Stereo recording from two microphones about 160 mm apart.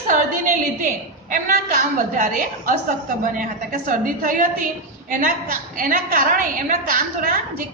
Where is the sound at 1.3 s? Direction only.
50° right (ahead or behind).